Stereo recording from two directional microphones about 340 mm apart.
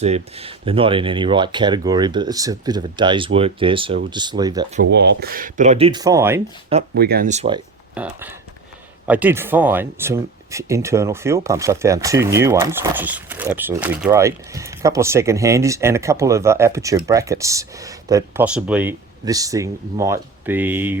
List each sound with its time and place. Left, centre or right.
0.0 s speech: centre
4.8 s speech: right; by 6.4 s centre
6.9 s speech: right
7.9 s speech: centre